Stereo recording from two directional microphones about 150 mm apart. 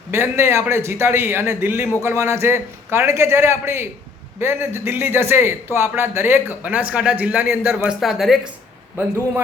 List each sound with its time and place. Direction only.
0.1 s a man's voice: 15° right (ahead or behind); by 8.4 s centre (ahead or behind)
9.0 s speech: 15° right (ahead or behind)